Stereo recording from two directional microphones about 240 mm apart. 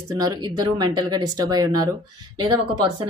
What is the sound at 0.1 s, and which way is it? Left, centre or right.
A woman's voice, centre.